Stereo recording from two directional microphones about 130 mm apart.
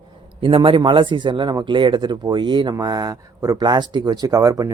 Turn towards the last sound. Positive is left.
turn(degrees=-25)  # may be behind; listen again after turning